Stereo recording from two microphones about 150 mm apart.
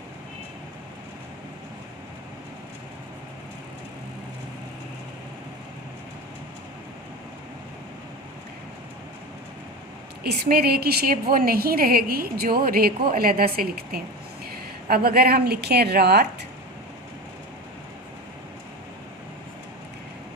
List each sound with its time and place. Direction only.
10.2 s a woman's voice: 90° right